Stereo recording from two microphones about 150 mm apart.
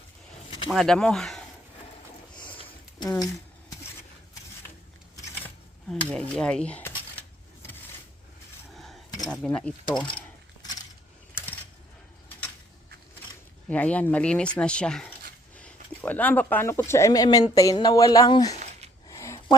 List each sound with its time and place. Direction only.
0.7 s speech: centre (ahead or behind)
2.3 s a sound: 10° left (ahead or behind)
5.9 s speech: 5° left (ahead or behind)
8.7 s cutlery: centre (ahead or behind)
9.2 s speech: 5° left (ahead or behind)
10.0 s mechanisms: 30° left (ahead or behind)
13.7 s speech: 10° left (ahead or behind); by 18.5 s 25° left (ahead or behind)
19.0 s a sound: 20° left (ahead or behind)